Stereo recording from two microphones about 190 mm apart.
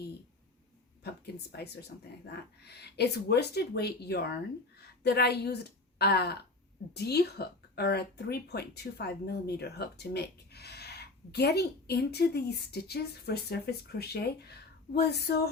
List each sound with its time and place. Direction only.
1.0 s speech: 60° left (ahead or behind)